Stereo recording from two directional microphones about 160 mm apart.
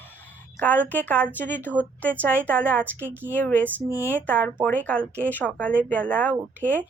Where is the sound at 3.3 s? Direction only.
10° left (ahead or behind).